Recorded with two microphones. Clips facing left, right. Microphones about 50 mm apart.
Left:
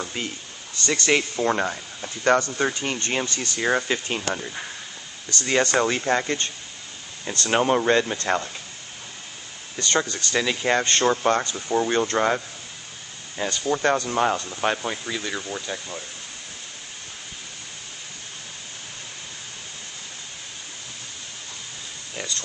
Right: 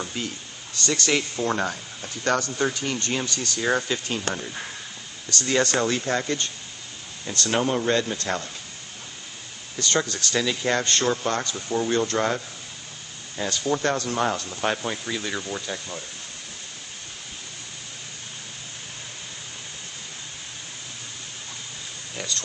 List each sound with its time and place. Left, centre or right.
0.8 s speech: left
2.2 s speech: left
5.3 s speech: centre
9.8 s speech: centre
13.4 s speech: centre